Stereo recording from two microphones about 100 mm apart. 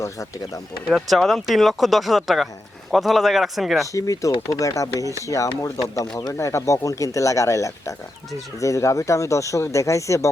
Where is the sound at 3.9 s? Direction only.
35° left (ahead or behind).